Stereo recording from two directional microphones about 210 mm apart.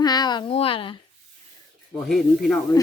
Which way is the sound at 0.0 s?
20° left (ahead or behind).